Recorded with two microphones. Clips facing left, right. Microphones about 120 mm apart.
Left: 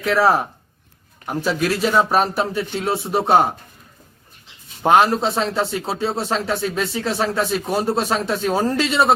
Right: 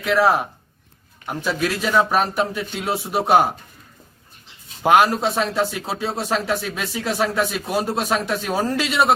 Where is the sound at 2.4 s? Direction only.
30° left (ahead or behind).